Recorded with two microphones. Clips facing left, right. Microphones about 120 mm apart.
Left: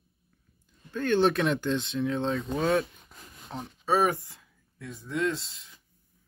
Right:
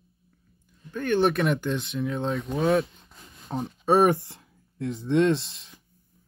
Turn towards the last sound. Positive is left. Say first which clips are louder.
# right 7 dB
turn(degrees=-70)  # may be behind; listen again after turning